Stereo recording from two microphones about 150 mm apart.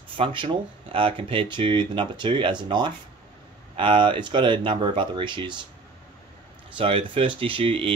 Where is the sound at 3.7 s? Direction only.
35° right (ahead or behind).